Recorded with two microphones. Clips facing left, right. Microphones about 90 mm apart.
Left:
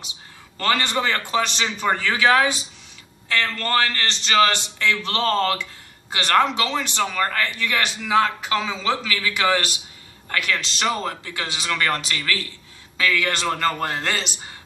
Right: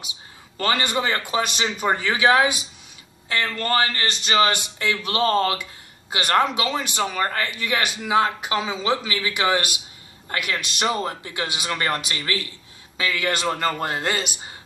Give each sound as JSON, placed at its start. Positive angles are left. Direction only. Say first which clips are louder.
{"t": 0.6, "sound": "a man's voice", "louder": "left 1 dB", "side_deg": -10}
{"t": 12.2, "sound": "a man's voice", "louder": "left 1 dB", "side_deg": -25}